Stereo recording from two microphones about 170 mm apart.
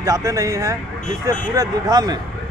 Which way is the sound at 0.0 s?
20° right (ahead or behind).